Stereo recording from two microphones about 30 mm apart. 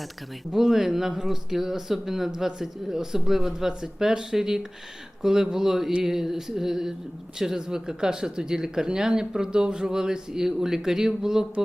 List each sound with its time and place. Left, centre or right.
0.5 s speech: centre